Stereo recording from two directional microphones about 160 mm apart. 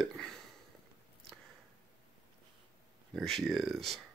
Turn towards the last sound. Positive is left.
turn(degrees=0)  # may be behind; listen again after turning